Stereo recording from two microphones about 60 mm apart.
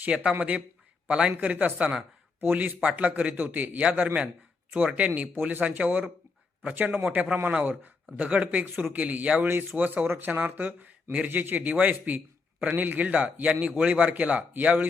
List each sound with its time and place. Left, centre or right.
0.0 s a man's voice: right